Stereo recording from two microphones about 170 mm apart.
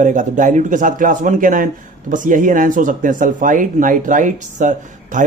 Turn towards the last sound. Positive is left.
turn(degrees=-45)  # may be behind; listen again after turning